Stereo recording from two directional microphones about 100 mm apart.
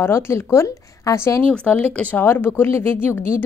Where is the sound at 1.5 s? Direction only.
15° left (ahead or behind).